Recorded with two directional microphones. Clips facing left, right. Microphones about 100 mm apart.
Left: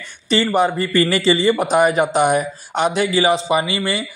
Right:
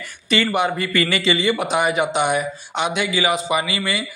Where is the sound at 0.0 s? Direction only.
30° left (ahead or behind).